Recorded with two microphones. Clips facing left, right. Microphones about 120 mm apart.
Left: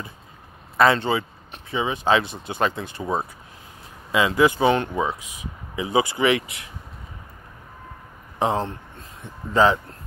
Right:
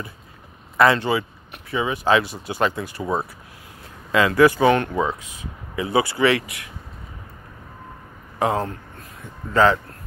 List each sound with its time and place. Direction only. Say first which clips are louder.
0.7 s speech: right 1 dB; 25° left (ahead or behind)
4.1 s speech: right 3 dB; 20° left (ahead or behind)
8.4 s speech: right 1 dB; 25° left (ahead or behind)